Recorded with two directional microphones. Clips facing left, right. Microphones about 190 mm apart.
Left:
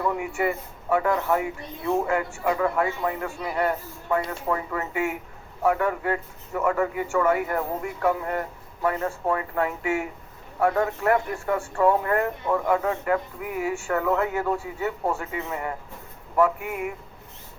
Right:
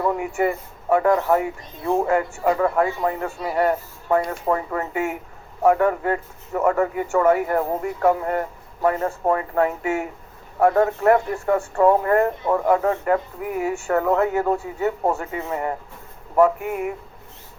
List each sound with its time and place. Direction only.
0.0 s speech: 40° right (ahead or behind)
8.8 s speech: 40° right (ahead or behind)